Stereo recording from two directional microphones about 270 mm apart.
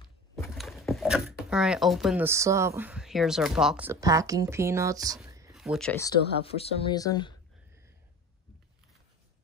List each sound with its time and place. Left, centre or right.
0.4 s speech: centre
5.2 s a sound: centre
5.5 s speech: centre
6.4 s speech: left